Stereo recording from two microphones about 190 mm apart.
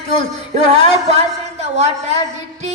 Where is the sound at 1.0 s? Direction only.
35° right (ahead or behind).